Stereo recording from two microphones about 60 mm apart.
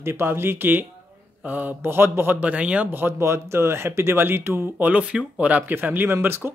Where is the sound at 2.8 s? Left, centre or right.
Right.